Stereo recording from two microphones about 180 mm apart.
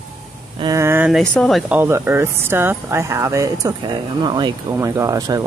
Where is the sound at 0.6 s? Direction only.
15° right (ahead or behind); by 1.8 s centre (ahead or behind).